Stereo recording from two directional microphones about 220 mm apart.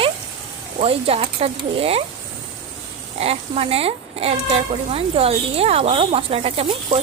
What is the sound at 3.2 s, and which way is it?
Speech, 25° right (ahead or behind).